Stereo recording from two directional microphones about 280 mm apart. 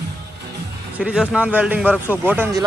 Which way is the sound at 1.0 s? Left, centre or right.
Centre.